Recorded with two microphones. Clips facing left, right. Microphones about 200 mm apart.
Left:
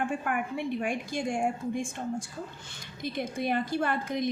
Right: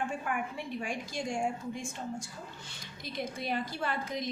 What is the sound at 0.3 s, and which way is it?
A woman's voice, 60° left (ahead or behind).